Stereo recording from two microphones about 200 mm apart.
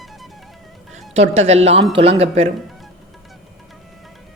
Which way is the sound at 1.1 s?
35° right (ahead or behind).